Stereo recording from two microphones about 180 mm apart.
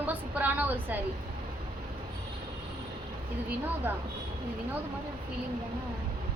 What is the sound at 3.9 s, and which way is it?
Speech, 10° right (ahead or behind).